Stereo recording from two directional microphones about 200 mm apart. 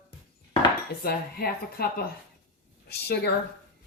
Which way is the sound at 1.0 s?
50° left (ahead or behind).